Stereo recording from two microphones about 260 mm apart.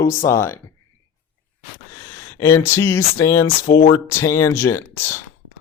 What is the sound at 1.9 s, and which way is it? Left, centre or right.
Speech, centre.